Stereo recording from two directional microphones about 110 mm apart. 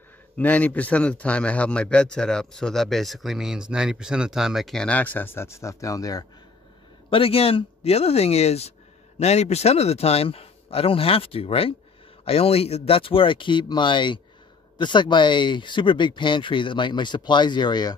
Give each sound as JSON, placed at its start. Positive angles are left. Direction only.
{"t": 0.4, "sound": "a man's voice", "side_deg": 15}
{"t": 7.1, "sound": "a man's voice", "side_deg": 60}